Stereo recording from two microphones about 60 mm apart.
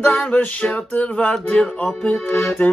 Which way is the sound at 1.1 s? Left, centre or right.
Centre.